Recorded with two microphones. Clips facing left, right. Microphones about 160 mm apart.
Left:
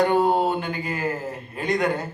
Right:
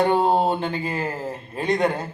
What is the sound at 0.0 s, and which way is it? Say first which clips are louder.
A man's voice: right 1 dB; 25° right (ahead or behind).